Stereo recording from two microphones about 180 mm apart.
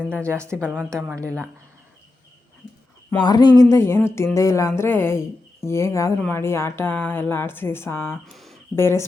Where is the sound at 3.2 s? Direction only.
20° left (ahead or behind).